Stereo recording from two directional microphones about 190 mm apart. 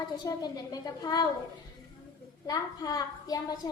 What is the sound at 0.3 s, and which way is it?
Speech, 20° left (ahead or behind).